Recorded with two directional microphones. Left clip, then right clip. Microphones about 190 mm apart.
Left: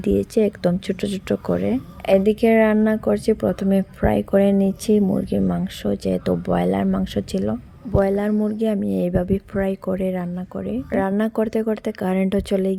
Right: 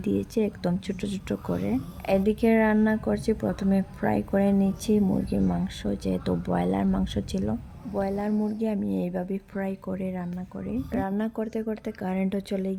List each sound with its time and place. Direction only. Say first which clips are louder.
0.0 s speech: left 8 dB; 20° left (ahead or behind)